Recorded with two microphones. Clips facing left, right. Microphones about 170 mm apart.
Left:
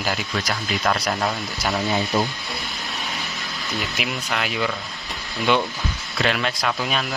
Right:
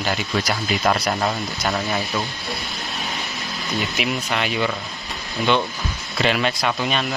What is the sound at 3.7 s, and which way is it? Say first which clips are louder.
Speech: right 4 dB; centre (ahead or behind).